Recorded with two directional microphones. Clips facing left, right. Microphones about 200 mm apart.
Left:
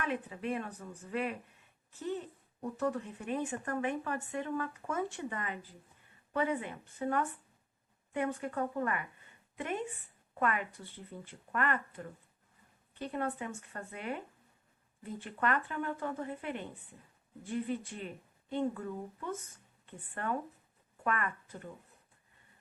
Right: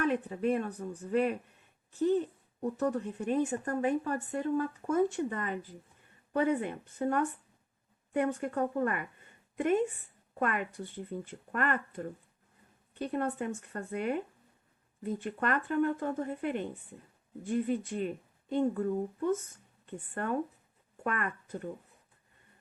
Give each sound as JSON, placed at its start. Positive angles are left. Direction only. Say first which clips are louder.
{"t": 0.1, "sound": "a woman's voice", "louder": "right 6 dB", "side_deg": -45}
{"t": 2.7, "sound": "a woman's voice", "louder": "right 2 dB", "side_deg": -45}
{"t": 10.4, "sound": "a woman's voice", "louder": "right 2 dB", "side_deg": -50}